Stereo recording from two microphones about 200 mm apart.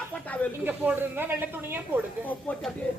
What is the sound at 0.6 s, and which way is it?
Speech, 10° right (ahead or behind).